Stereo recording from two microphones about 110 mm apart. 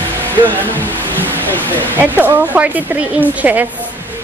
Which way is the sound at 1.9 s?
15° right (ahead or behind).